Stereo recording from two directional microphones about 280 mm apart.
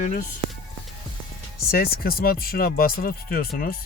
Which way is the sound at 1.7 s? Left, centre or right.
Left.